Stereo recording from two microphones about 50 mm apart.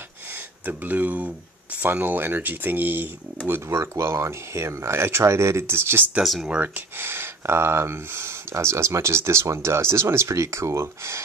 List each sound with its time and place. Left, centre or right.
0.7 s speech: right
3.6 s speech: right
6.2 s speech: centre
7.0 s speech: right